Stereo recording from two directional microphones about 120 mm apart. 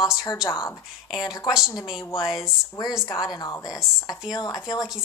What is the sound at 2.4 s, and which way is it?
Speech, 35° left (ahead or behind).